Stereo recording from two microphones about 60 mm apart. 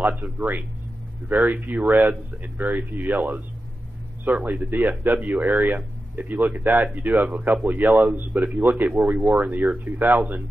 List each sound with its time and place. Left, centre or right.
0.2 s speech: right